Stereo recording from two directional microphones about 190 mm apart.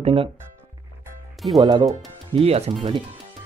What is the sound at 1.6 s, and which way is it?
Speech, 20° right (ahead or behind).